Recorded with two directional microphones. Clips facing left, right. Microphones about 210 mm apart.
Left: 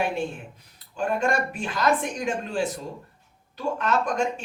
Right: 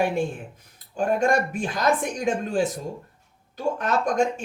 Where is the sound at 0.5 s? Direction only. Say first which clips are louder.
Right 5 dB; 45° right (ahead or behind).